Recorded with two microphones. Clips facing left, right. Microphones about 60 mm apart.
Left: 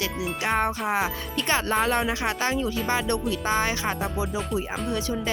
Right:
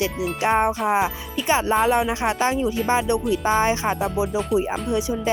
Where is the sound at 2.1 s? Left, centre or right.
Right.